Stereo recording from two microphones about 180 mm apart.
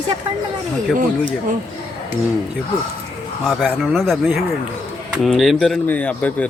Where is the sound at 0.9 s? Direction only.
45° right (ahead or behind).